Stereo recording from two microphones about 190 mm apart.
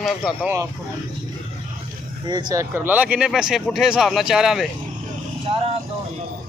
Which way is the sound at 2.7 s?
10° right (ahead or behind).